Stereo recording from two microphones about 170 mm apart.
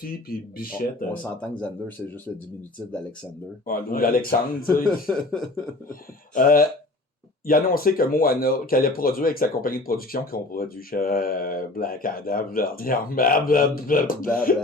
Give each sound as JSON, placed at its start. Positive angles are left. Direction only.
{"t": 0.0, "sound": "speech", "side_deg": 60}
{"t": 3.7, "sound": "speech", "side_deg": 55}
{"t": 5.0, "sound": "speech", "side_deg": 0}
{"t": 5.9, "sound": "speech", "side_deg": 55}